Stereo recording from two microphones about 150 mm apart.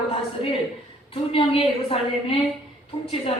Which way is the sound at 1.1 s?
35° left (ahead or behind).